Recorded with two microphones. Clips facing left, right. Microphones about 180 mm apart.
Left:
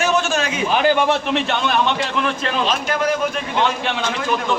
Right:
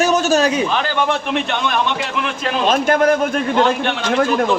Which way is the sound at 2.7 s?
50° right (ahead or behind).